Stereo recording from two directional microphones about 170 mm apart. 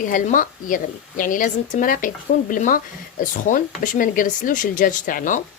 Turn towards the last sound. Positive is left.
turn(degrees=50)  # may be behind; listen again after turning